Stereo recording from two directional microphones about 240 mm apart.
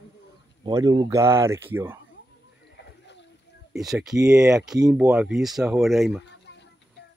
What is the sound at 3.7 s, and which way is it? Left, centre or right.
A man's voice, centre.